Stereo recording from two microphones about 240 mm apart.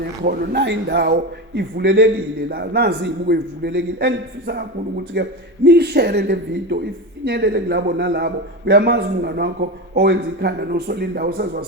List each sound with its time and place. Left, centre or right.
0.0 s a man's voice: right